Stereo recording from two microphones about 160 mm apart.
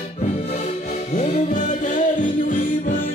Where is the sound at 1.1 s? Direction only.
45° left (ahead or behind).